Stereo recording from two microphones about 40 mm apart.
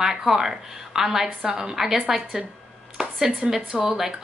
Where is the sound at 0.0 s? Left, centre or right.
Centre.